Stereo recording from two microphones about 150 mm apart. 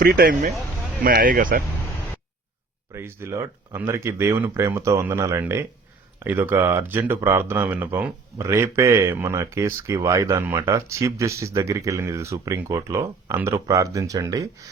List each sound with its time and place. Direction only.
0.0 s speech: 85° right
1.0 s speech: 70° right (ahead or behind)
2.9 s speech: 15° right (ahead or behind)